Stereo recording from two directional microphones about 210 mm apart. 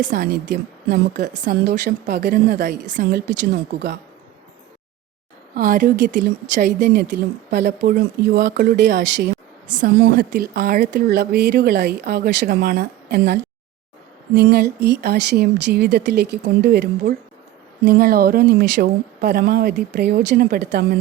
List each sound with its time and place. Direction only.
0.0 s a woman's voice: 45° right (ahead or behind)
5.5 s a woman's voice: 40° right (ahead or behind)
9.8 s a woman's voice: 40° right (ahead or behind)